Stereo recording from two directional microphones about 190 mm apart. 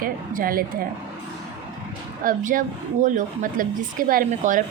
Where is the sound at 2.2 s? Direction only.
45° right (ahead or behind).